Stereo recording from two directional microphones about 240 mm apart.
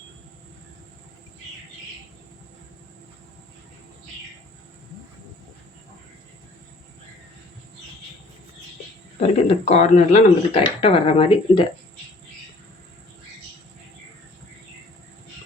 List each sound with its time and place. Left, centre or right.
9.2 s speech: left